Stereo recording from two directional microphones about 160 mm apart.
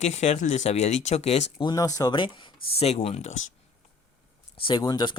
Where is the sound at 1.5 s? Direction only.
25° left (ahead or behind); by 3.3 s 40° left (ahead or behind).